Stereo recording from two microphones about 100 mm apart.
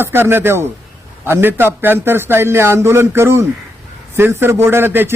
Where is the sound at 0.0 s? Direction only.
20° right (ahead or behind).